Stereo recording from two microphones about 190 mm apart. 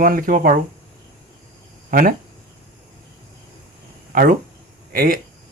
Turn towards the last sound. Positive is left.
turn(degrees=-50)  # may be behind; listen again after turning